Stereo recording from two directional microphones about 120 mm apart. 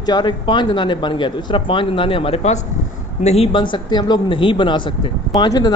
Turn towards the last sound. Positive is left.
turn(degrees=35)  # may be behind; listen again after turning